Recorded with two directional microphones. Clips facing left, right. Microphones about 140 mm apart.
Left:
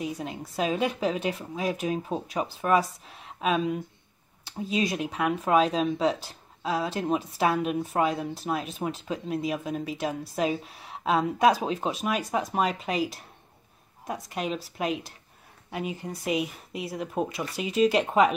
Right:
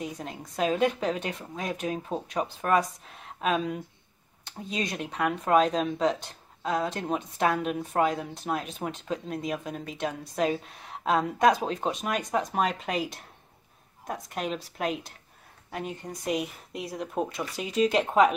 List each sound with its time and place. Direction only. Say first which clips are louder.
0.0 s speech: left 3 dB; 5° left (ahead or behind)